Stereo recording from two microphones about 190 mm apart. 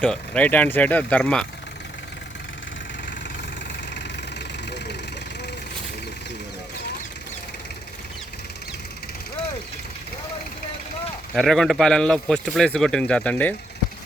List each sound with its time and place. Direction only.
0.0 s speech: 5° left (ahead or behind)
11.3 s speech: centre (ahead or behind)